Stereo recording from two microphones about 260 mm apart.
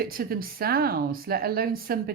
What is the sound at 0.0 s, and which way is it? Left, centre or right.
Speech, right.